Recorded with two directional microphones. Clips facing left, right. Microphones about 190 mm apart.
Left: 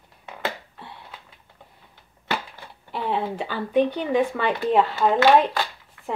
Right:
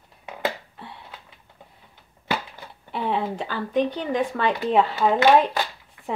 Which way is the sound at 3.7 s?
55° left (ahead or behind).